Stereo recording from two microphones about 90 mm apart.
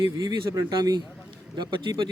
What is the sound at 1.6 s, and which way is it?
Speech, 60° right (ahead or behind).